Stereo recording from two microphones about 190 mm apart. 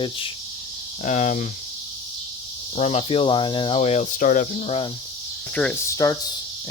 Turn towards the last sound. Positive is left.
turn(degrees=15)  # may be behind; listen again after turning